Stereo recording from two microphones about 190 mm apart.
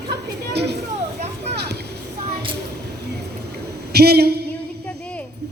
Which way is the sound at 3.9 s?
55° right (ahead or behind).